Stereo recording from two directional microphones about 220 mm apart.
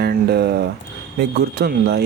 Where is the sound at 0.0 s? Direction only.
45° right (ahead or behind).